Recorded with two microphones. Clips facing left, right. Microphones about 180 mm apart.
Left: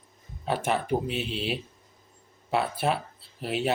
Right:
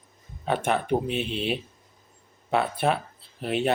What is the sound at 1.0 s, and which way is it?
Speech, 55° right (ahead or behind).